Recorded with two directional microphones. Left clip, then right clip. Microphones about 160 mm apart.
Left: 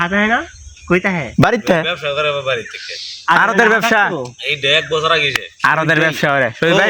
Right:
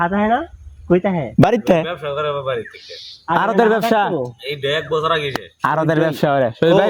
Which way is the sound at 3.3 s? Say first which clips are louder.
Left 4 dB; centre (ahead or behind).